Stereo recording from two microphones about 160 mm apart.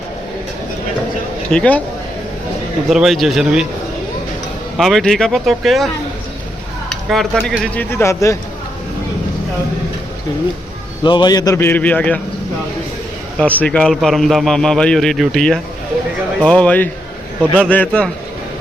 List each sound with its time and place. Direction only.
1.5 s speech: 5° left (ahead or behind)
2.9 s a man's voice: centre (ahead or behind)
4.8 s a man's voice: centre (ahead or behind)
7.1 s speech: centre (ahead or behind); by 8.4 s 20° left (ahead or behind)
11.0 s speech: 30° left (ahead or behind); by 12.2 s 10° left (ahead or behind)
13.4 s a man's voice: 10° left (ahead or behind)